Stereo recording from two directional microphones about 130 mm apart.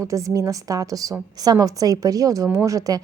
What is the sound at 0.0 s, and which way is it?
Speech, 25° right (ahead or behind).